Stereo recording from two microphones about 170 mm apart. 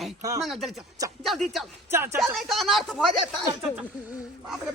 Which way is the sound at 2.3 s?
Centre (ahead or behind).